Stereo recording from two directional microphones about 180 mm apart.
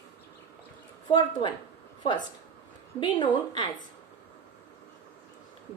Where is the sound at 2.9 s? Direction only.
25° left (ahead or behind).